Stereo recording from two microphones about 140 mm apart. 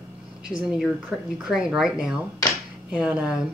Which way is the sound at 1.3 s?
5° right (ahead or behind).